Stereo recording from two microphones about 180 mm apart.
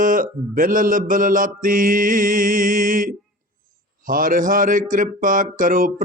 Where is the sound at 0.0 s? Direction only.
50° right (ahead or behind).